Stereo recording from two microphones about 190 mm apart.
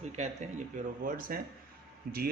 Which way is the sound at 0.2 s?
35° right (ahead or behind).